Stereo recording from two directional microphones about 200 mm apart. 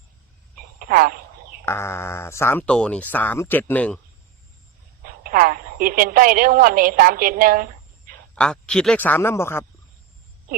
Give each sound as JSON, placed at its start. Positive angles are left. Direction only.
{"t": 0.8, "sound": "a sound", "side_deg": -45}
{"t": 1.6, "sound": "speech", "side_deg": 10}
{"t": 5.0, "sound": "telephone", "side_deg": -45}
{"t": 8.4, "sound": "speech", "side_deg": 5}